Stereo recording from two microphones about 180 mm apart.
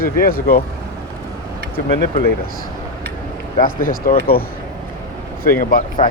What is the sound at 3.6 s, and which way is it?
Speech, 50° left (ahead or behind).